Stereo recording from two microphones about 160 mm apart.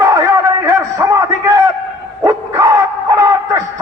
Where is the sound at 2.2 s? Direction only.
20° right (ahead or behind).